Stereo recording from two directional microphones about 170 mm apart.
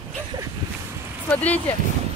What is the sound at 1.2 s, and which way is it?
Speech, 10° left (ahead or behind).